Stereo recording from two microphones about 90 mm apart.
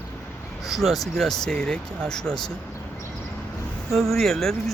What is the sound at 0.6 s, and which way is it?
Speech, centre (ahead or behind).